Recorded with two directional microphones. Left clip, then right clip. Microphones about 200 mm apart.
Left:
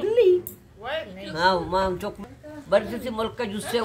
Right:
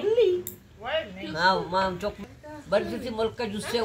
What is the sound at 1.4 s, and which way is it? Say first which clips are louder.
Speech: left 2 dB; 30° left (ahead or behind).